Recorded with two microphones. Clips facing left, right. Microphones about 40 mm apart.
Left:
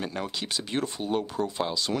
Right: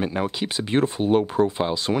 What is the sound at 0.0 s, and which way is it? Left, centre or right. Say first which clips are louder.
Speech: right 7 dB; right.